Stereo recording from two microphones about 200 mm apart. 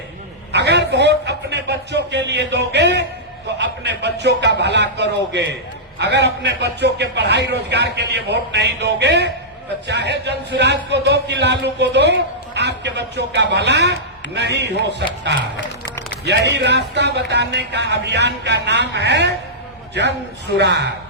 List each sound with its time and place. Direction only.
0.5 s a man's voice: 60° right (ahead or behind)
16.2 s a man's voice: 60° right (ahead or behind)